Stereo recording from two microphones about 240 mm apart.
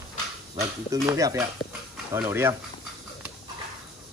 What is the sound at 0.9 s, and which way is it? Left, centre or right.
Speech, centre.